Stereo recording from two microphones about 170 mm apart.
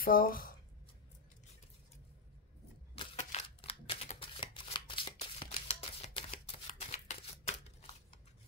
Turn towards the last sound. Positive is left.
turn(degrees=40)  # may be behind; listen again after turning